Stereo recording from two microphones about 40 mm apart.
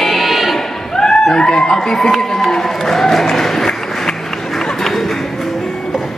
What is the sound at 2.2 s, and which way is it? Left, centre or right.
Speech, centre.